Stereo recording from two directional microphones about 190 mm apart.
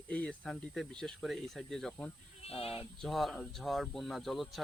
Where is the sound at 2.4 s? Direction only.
30° left (ahead or behind).